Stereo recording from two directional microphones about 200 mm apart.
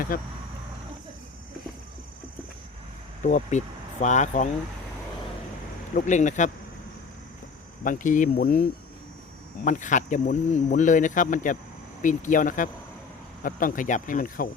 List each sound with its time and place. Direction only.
0.1 s speech: 45° left (ahead or behind)
3.2 s speech: 35° left (ahead or behind)
5.9 s speech: 40° left (ahead or behind)
7.9 s speech: 40° left (ahead or behind)
9.6 s speech: 40° left (ahead or behind)